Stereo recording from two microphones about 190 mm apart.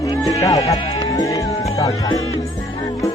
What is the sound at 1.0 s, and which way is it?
Speech, 20° left (ahead or behind).